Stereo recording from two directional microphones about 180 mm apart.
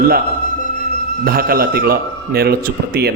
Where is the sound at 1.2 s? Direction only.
55° right (ahead or behind).